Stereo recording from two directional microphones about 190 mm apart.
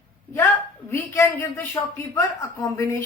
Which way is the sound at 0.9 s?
15° left (ahead or behind).